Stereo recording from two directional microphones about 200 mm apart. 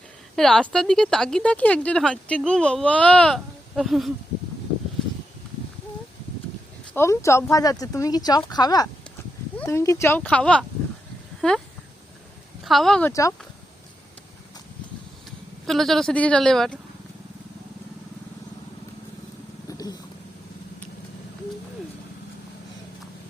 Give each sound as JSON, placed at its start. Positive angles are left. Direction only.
{"t": 0.3, "sound": "speech", "side_deg": 5}
{"t": 6.9, "sound": "speech", "side_deg": 15}
{"t": 12.6, "sound": "speech", "side_deg": 0}
{"t": 15.6, "sound": "speech", "side_deg": 0}
{"t": 19.6, "sound": "cat", "side_deg": 20}